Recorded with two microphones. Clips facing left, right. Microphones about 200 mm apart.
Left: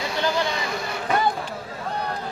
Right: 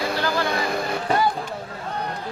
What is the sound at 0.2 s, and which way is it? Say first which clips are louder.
Vehicle: left 4 dB; 20° left (ahead or behind).